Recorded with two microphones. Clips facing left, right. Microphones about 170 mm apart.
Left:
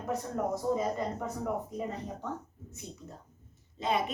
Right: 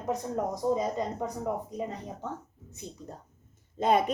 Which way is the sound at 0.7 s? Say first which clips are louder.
Right 2 dB; 20° right (ahead or behind).